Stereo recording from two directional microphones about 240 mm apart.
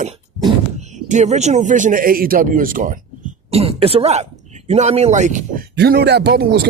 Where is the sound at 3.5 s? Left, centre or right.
Right.